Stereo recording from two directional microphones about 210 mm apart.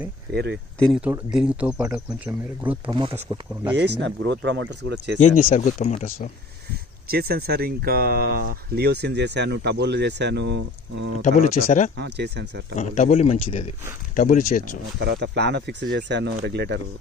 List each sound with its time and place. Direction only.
0.3 s speech: 55° right (ahead or behind)
1.0 s speech: 5° right (ahead or behind)
2.9 s speech: 25° right (ahead or behind)
3.2 s speech: 10° right (ahead or behind)
3.9 s speech: 60° right (ahead or behind)
5.4 s speech: 40° left (ahead or behind)
7.1 s speech: 45° right (ahead or behind)
11.3 s speech: 40° left (ahead or behind)
11.9 s speech: 55° right (ahead or behind)
12.7 s speech: 35° left (ahead or behind)
14.2 s speech: 40° left (ahead or behind)
15.0 s speech: 55° right (ahead or behind)